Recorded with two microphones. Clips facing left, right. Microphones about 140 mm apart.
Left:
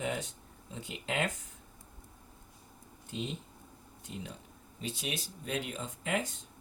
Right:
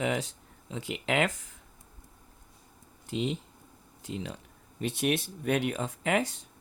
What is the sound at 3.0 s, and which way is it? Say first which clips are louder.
Speech: right 7 dB; 90° right.